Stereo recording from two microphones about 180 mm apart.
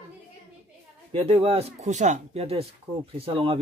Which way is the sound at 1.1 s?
30° right (ahead or behind).